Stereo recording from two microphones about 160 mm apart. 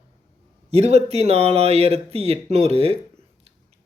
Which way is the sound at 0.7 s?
40° right (ahead or behind).